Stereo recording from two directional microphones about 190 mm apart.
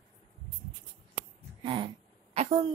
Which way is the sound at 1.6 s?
25° right (ahead or behind).